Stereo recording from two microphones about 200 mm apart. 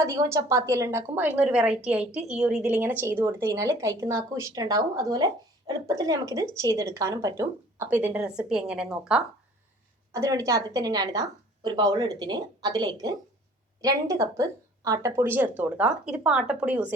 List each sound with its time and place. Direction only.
0.0 s a woman's voice: 15° right (ahead or behind)
10.1 s a woman's voice: 15° right (ahead or behind)